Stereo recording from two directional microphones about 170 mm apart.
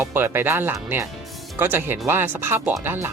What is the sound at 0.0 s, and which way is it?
Speech, 10° right (ahead or behind).